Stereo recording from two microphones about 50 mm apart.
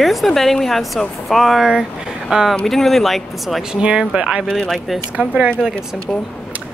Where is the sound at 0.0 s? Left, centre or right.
Centre.